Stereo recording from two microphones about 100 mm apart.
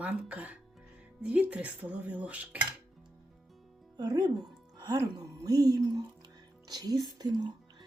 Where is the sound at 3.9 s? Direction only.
45° right (ahead or behind).